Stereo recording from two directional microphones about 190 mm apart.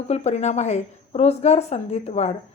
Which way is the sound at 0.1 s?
35° left (ahead or behind).